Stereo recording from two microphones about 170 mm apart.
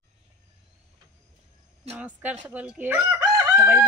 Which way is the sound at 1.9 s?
10° right (ahead or behind).